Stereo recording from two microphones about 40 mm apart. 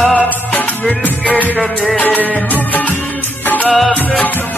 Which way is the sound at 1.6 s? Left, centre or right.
Centre.